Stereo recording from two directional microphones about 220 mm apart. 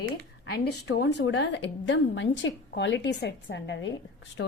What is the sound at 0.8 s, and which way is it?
A woman's voice, 50° left (ahead or behind).